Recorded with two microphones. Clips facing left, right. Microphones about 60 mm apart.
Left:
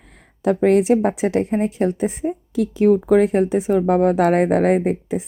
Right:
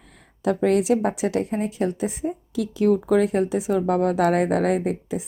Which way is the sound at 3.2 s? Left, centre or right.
Left.